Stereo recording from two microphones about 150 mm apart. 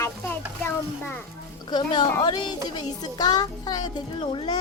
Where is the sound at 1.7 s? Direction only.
30° left (ahead or behind).